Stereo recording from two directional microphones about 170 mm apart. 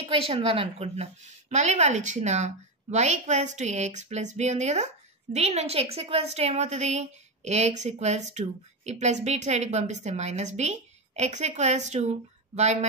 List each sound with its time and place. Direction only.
0.1 s a woman's voice: 35° right (ahead or behind)